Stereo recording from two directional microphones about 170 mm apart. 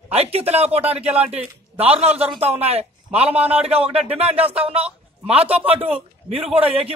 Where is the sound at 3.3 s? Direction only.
35° right (ahead or behind).